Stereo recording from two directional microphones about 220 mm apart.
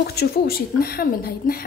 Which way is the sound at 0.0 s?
45° left (ahead or behind).